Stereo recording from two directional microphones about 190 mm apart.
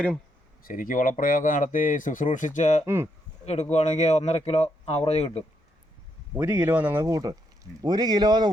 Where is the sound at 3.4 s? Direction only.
35° left (ahead or behind).